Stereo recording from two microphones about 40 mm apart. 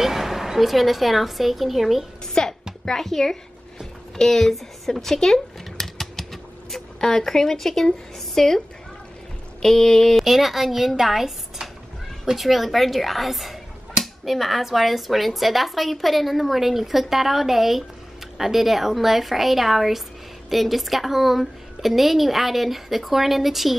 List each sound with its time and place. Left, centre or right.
0.0 s speech: centre
2.4 s a woman's voice: centre
5.0 s typewriter: centre
8.4 s a child's voice: centre
10.1 s speech: centre
12.4 s speech: centre